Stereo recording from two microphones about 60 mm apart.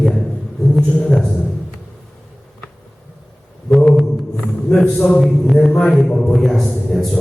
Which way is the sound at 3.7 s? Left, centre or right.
Centre.